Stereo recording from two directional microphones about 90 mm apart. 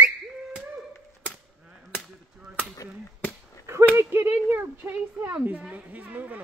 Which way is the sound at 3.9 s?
30° right (ahead or behind).